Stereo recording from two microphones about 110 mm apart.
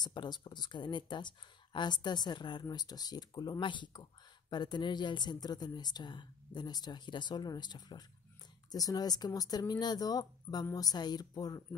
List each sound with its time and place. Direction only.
0.0 s speech: 40° left (ahead or behind)